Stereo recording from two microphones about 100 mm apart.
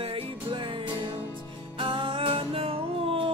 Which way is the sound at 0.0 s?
65° right (ahead or behind).